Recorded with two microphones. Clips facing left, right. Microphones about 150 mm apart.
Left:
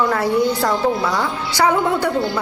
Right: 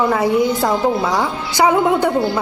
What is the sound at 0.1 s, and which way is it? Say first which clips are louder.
A woman's voice: right 2 dB; 20° right (ahead or behind).